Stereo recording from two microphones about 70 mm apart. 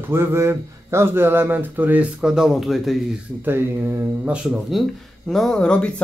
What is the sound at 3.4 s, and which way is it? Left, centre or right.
Speech, right.